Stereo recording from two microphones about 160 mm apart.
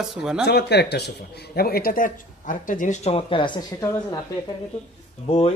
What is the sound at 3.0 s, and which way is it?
Speech, 35° left (ahead or behind).